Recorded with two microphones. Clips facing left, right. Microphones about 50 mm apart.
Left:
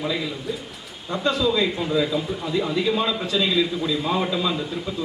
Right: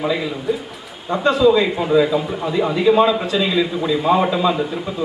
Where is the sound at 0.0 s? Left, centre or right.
Centre.